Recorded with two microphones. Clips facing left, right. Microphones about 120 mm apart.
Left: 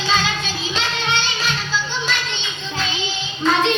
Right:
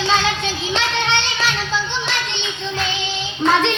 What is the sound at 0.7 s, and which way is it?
Music, 70° right (ahead or behind).